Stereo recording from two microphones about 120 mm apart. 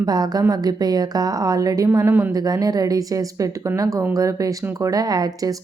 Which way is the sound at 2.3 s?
30° right (ahead or behind).